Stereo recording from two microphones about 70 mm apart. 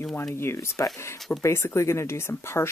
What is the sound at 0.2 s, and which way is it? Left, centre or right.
Speech, left.